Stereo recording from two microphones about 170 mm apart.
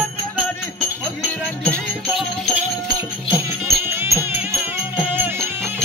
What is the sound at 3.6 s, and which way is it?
Music, 15° right (ahead or behind).